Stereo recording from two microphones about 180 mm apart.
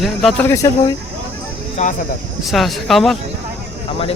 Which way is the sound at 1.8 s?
40° left (ahead or behind).